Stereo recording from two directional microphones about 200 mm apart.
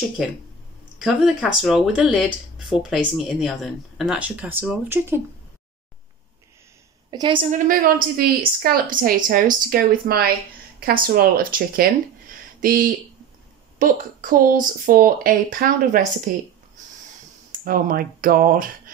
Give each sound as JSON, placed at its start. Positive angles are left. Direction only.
{"t": 0.9, "sound": "speech", "side_deg": 0}
{"t": 7.1, "sound": "a woman's voice", "side_deg": -25}
{"t": 7.5, "sound": "a woman's voice", "side_deg": -45}
{"t": 17.5, "sound": "speech", "side_deg": -45}